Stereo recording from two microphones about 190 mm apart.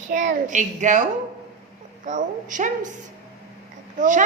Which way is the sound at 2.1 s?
40° right (ahead or behind).